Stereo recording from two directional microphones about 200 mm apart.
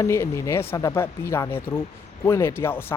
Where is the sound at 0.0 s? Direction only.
15° left (ahead or behind).